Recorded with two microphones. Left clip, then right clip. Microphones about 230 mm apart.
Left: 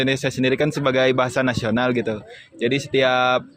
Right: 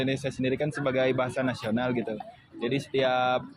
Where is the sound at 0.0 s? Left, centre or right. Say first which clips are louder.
Left 9 dB; left.